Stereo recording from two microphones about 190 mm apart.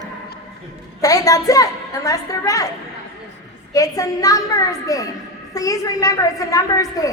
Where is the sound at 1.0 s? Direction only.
20° left (ahead or behind).